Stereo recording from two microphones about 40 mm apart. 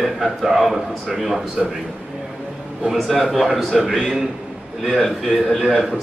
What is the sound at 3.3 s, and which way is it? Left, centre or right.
Speech, centre.